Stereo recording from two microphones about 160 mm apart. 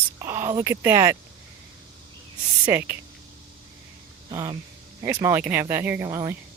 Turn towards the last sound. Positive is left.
turn(degrees=-20)  # may be behind; listen again after turning